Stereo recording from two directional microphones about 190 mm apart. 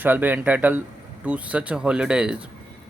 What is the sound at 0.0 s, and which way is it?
Speech, 10° right (ahead or behind).